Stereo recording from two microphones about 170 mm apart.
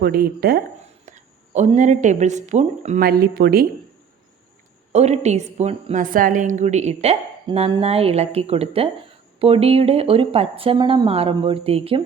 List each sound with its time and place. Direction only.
0.0 s speech: 65° right (ahead or behind)
1.0 s speech: 45° right (ahead or behind)
3.0 s speech: 60° right (ahead or behind)
4.9 s a woman's voice: 40° right (ahead or behind)